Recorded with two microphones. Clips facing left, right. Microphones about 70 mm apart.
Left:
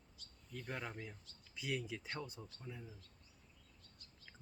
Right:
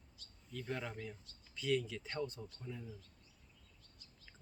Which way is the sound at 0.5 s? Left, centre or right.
Centre.